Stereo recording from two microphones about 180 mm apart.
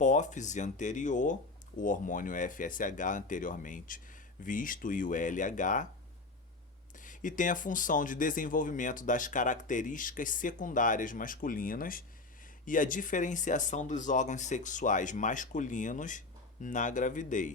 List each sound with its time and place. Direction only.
0.0 s speech: 45° left (ahead or behind)
7.0 s speech: 45° left (ahead or behind)